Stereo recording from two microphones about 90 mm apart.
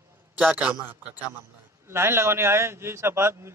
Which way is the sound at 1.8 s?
30° right (ahead or behind).